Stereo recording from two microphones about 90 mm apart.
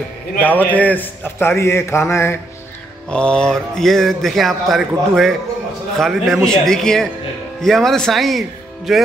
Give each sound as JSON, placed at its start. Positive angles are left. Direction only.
{"t": 0.4, "sound": "a man's voice", "side_deg": 20}
{"t": 3.1, "sound": "speech", "side_deg": 10}